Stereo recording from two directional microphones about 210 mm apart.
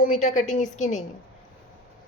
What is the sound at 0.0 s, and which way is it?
A woman's voice, 35° left (ahead or behind).